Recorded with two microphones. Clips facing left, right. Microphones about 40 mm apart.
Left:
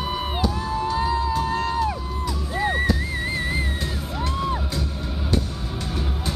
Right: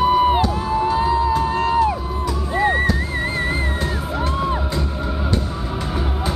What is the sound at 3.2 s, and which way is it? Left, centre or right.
Music, right.